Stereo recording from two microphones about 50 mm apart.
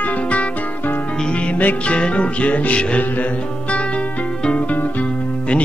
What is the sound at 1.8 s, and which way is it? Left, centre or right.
Music, left.